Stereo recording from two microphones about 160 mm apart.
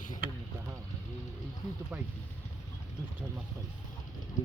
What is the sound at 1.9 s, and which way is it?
Speech, 5° right (ahead or behind).